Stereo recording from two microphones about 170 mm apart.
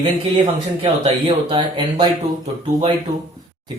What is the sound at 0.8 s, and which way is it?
Speech, 30° right (ahead or behind).